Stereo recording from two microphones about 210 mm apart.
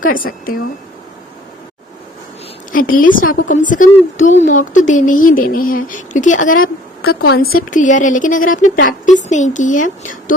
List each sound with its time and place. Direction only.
0.0 s speech: 40° left (ahead or behind)
2.7 s speech: 40° left (ahead or behind)